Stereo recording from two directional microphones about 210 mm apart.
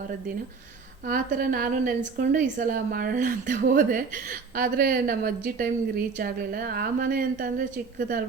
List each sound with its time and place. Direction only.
1.0 s a woman's voice: 45° right (ahead or behind)